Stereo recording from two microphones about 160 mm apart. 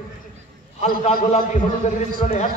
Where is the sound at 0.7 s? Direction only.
45° left (ahead or behind).